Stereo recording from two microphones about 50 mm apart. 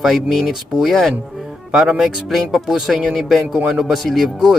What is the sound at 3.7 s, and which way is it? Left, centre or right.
Speech, centre.